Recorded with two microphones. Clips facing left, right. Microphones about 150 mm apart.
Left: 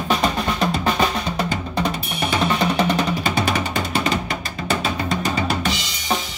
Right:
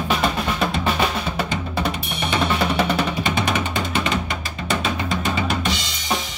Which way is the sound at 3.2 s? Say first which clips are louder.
Left 1 dB; 40° left (ahead or behind).